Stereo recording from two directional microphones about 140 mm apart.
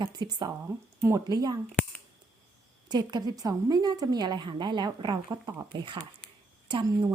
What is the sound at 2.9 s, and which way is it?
Speech, 30° right (ahead or behind).